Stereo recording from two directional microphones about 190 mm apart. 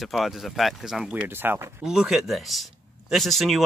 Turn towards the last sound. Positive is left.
turn(degrees=0)  # may be behind; listen again after turning